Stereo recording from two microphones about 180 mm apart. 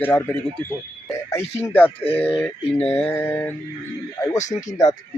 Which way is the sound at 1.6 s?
10° left (ahead or behind).